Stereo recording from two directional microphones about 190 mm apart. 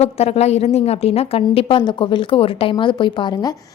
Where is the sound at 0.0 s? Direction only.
35° left (ahead or behind).